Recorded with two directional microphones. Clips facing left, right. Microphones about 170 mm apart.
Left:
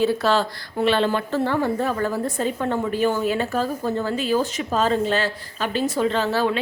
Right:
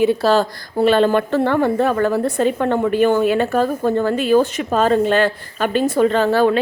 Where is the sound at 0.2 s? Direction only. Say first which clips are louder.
Right 5 dB; 40° right (ahead or behind).